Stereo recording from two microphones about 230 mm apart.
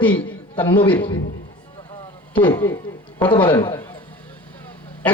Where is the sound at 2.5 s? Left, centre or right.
Centre.